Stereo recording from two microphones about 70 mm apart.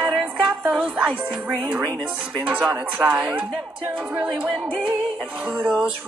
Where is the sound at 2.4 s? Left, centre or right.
Right.